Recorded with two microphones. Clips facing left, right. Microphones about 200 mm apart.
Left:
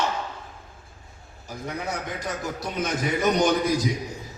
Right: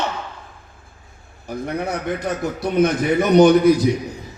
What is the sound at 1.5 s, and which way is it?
A man's voice, 60° right (ahead or behind).